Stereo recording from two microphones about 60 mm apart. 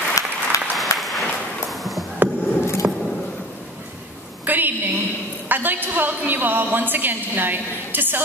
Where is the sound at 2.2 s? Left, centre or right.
Right.